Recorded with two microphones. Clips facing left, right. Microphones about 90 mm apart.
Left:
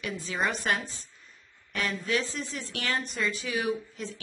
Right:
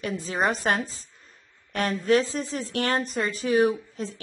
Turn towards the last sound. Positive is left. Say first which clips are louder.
# right 2 dB
turn(degrees=-40)  # may be behind; listen again after turning